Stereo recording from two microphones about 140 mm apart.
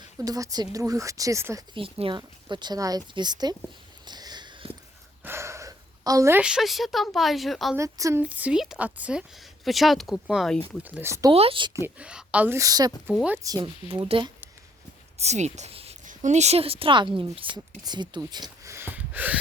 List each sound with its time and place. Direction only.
0.2 s speech: 25° right (ahead or behind)
1.7 s speech: 40° right (ahead or behind)
4.0 s sniff: 30° right (ahead or behind)
5.2 s a sound: 20° right (ahead or behind)
6.4 s speech: 5° right (ahead or behind)
7.8 s speech: 20° right (ahead or behind)
8.2 s speech: 10° right (ahead or behind)
10.8 s speech: 15° right (ahead or behind)
11.3 s speech: 40° right (ahead or behind)
11.9 s speech: 10° right (ahead or behind); by 13.7 s 25° right (ahead or behind)
13.8 s speech: 40° right (ahead or behind)
15.2 s speech: 50° right (ahead or behind)
16.0 s speech: 55° right (ahead or behind); by 19.4 s 10° right (ahead or behind)